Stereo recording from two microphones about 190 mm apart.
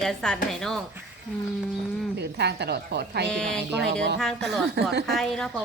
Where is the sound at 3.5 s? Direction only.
65° right (ahead or behind).